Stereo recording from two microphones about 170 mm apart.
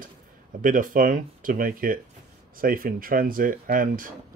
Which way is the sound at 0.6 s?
50° right (ahead or behind).